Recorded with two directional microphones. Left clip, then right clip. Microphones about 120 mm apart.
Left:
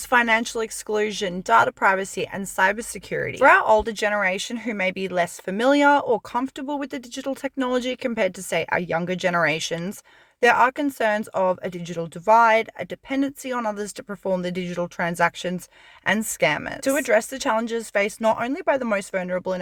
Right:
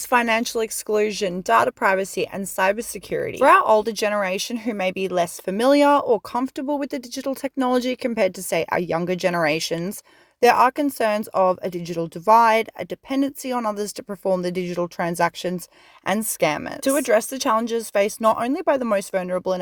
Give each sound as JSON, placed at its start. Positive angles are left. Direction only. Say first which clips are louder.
{"t": 0.1, "sound": "a woman's voice", "louder": "even", "side_deg": -35}